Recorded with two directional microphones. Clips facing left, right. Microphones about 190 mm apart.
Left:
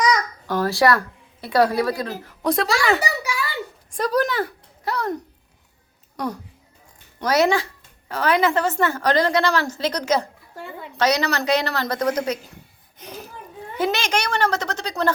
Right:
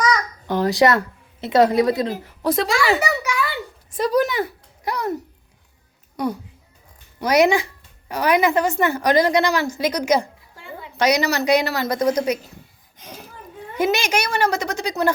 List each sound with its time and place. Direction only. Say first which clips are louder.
0.4 s speech: right 2 dB; 20° right (ahead or behind)
2.4 s speech: right 1 dB; centre (ahead or behind)
3.0 s a sound: right 3 dB; 35° left (ahead or behind)
3.9 s a woman's voice: right 2 dB; 10° right (ahead or behind)
13.7 s a woman's voice: right 2 dB; 10° right (ahead or behind)